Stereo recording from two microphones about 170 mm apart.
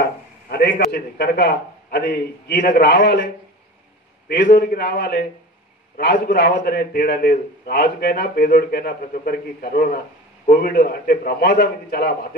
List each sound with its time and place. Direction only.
0.5 s a man's voice: 70° left (ahead or behind)
2.7 s a man's voice: 85° left
4.3 s a man's voice: 80° left; by 12.3 s 65° left (ahead or behind)